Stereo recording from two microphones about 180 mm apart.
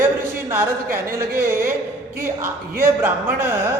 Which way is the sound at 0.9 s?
50° right (ahead or behind).